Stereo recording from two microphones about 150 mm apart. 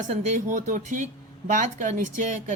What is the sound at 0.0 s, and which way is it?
A woman's voice, 50° right (ahead or behind).